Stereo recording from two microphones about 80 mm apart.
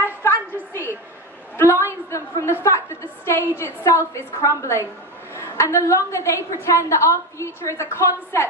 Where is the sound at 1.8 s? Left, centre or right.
Left.